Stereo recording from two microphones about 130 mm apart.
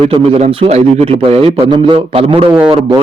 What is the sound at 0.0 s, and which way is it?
Speech, 50° right (ahead or behind).